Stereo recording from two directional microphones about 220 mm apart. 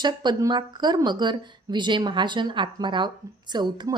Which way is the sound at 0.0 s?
20° right (ahead or behind).